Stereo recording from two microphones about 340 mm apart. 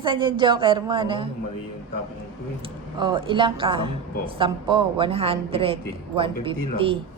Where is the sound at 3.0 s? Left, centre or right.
Centre.